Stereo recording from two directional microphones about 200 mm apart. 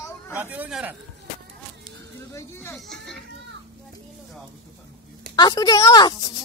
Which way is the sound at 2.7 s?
Centre (ahead or behind).